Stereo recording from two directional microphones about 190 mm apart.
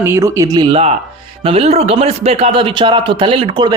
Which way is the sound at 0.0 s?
15° right (ahead or behind).